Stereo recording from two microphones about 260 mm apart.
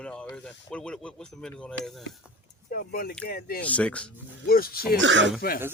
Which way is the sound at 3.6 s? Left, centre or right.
Centre.